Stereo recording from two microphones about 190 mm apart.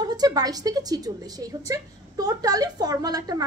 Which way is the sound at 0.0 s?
20° right (ahead or behind).